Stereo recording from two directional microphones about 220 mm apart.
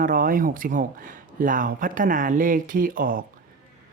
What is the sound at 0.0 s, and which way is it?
Speech, 40° right (ahead or behind).